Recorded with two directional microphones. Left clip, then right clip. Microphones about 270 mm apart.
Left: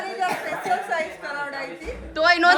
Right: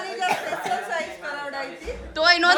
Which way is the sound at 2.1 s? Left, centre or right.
Centre.